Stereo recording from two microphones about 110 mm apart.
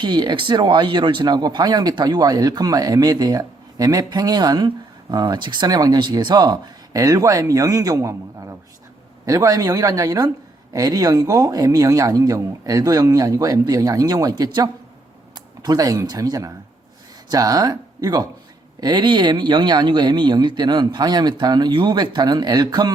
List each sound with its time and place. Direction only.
0.0 s speech: 45° right (ahead or behind)